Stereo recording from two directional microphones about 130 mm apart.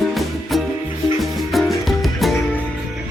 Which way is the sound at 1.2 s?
Centre (ahead or behind).